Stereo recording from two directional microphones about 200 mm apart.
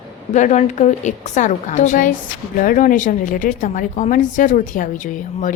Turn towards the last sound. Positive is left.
turn(degrees=40)  # may be behind; listen again after turning